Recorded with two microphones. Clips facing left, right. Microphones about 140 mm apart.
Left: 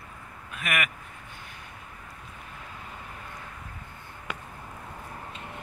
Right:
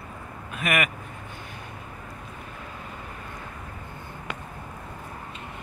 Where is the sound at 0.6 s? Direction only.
15° right (ahead or behind).